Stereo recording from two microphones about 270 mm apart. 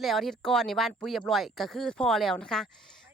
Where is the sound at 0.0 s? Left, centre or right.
Centre.